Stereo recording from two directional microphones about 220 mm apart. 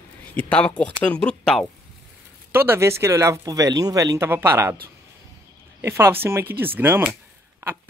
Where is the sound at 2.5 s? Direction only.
10° right (ahead or behind).